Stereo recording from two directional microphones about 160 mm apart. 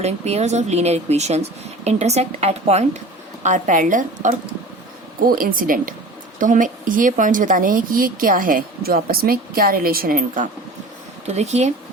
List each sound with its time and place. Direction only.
0.0 s speech: 40° right (ahead or behind)
5.2 s speech: 65° right (ahead or behind)
11.3 s speech: 45° right (ahead or behind)